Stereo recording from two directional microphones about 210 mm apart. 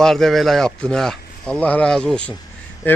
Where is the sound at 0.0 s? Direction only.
Centre (ahead or behind).